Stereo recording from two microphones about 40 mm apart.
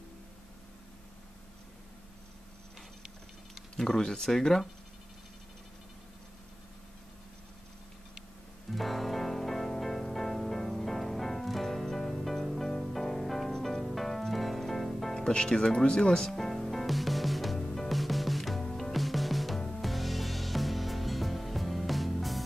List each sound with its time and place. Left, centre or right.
3.7 s speech: centre
8.7 s music: centre
15.1 s speech: centre
15.8 s music: left; by 22.4 s centre